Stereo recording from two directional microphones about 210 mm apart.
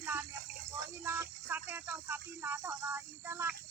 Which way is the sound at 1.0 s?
10° right (ahead or behind).